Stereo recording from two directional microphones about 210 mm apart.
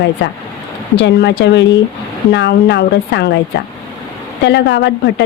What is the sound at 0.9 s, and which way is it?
A woman's voice, 55° left (ahead or behind).